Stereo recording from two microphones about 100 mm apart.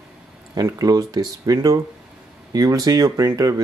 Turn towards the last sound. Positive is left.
turn(degrees=-40)  # may be behind; listen again after turning